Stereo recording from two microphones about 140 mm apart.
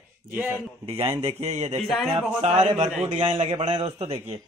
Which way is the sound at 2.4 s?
50° right (ahead or behind).